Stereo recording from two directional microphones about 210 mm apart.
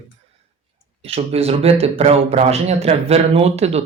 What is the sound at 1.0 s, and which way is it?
Speech, 30° right (ahead or behind).